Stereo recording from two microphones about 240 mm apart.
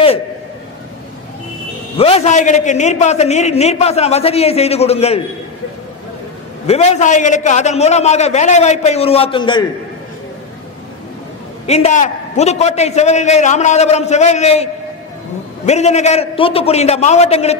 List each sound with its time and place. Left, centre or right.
2.0 s a man's voice: left
6.7 s a man's voice: left
11.6 s a man's voice: left